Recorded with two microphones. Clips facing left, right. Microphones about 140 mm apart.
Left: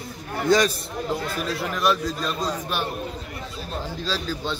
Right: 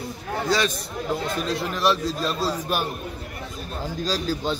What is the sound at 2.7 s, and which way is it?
Speech, 40° right (ahead or behind).